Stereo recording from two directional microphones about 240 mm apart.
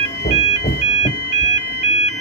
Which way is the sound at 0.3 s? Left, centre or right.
Left.